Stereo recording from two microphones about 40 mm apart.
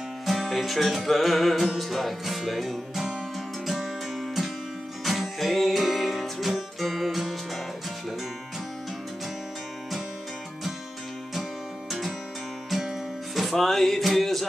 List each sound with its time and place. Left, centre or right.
0.3 s music: centre
5.0 s music: centre
12.6 s music: centre